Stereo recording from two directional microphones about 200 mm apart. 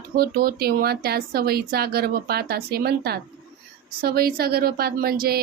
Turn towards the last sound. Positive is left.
turn(degrees=-50)  # may be behind; listen again after turning